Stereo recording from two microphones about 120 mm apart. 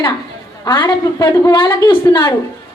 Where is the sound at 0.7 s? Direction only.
40° left (ahead or behind).